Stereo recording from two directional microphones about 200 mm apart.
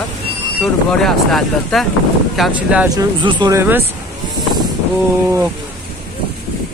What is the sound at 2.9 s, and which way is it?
Speech, 25° right (ahead or behind).